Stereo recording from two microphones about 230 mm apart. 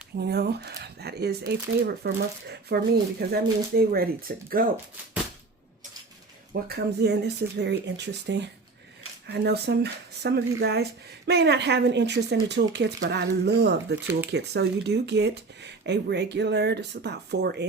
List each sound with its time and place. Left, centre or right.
0.2 s speech: right
6.5 s speech: right